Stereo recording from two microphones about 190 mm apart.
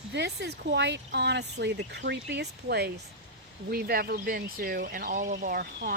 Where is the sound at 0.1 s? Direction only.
65° right (ahead or behind).